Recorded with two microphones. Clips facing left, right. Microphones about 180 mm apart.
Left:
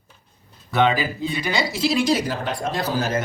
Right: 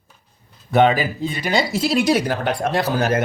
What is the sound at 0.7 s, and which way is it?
Speech, 50° right (ahead or behind).